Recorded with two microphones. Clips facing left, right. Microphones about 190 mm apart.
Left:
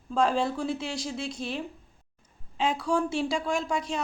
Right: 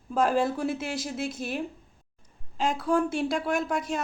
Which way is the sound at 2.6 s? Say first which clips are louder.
Right 1 dB; centre (ahead or behind).